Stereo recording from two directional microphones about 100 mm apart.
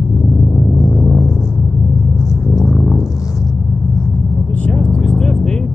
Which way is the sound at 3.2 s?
35° left (ahead or behind).